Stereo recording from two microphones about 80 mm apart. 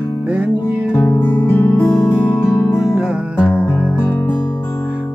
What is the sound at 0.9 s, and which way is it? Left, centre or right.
Music, left.